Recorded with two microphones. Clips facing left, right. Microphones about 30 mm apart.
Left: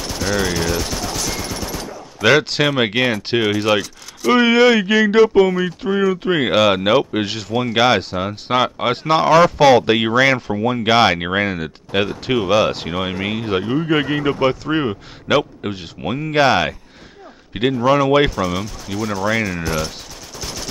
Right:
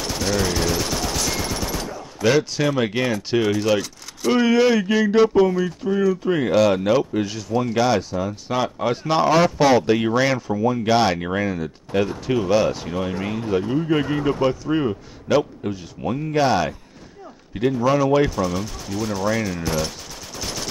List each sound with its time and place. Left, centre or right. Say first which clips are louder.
0.0 s a sound: left 2 dB; centre
0.5 s fusillade: left 1 dB; centre
2.2 s speech: left 4 dB; left
2.7 s speech: left 3 dB; left
4.3 s speech: left 4 dB; left
9.1 s speech: left 5 dB; left
9.6 s speech: left 4 dB; left
18.3 s speech: left 2 dB; centre
20.3 s machine gun: even; centre